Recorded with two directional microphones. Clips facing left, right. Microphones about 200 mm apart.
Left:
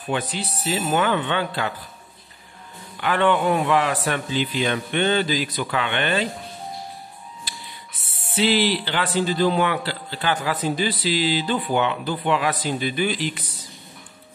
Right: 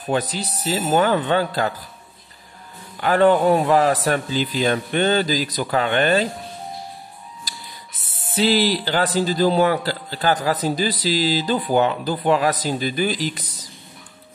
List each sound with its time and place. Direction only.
0.1 s a man's voice: 40° right (ahead or behind)
3.0 s a man's voice: 40° right (ahead or behind)
8.4 s a man's voice: 40° right (ahead or behind)